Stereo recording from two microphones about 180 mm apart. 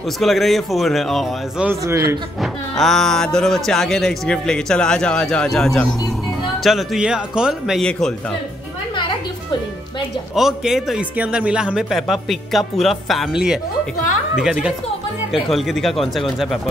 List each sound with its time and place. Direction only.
0.2 s a man's voice: centre (ahead or behind)
2.8 s a man's voice: centre (ahead or behind)
10.3 s a man's voice: centre (ahead or behind)